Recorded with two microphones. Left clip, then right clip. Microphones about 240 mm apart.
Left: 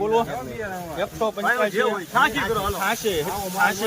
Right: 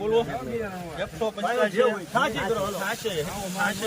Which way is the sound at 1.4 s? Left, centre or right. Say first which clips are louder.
Left 1 dB; left.